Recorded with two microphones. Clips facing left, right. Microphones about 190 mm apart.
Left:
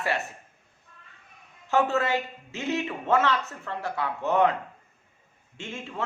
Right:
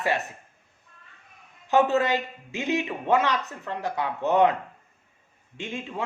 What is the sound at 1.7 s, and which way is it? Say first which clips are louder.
A man's voice: right 3 dB; 20° right (ahead or behind).